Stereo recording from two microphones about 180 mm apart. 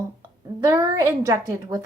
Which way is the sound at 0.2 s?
15° right (ahead or behind).